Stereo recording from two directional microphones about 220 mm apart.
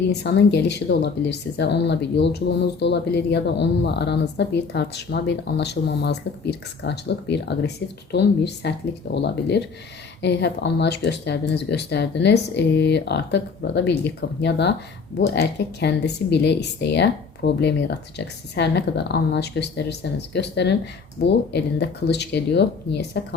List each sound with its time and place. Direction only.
0.1 s speech: 50° left (ahead or behind)